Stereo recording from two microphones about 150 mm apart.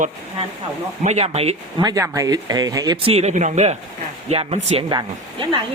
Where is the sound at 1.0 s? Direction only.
45° right (ahead or behind).